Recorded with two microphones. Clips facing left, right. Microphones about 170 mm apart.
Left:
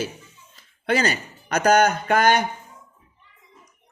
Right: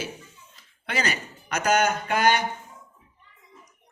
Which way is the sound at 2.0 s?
45° left (ahead or behind).